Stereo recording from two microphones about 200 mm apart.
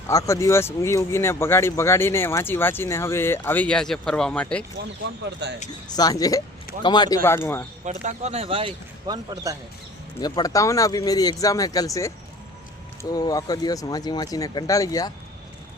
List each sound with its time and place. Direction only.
0.1 s speech: 15° left (ahead or behind)
5.4 s speech: 60° right (ahead or behind)
5.9 s speech: 20° left (ahead or behind)
7.9 s speech: 35° right (ahead or behind); by 9.6 s 20° right (ahead or behind)
10.2 s speech: 20° left (ahead or behind)